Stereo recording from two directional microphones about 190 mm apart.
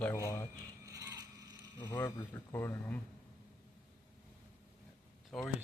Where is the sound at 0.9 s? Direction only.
20° right (ahead or behind).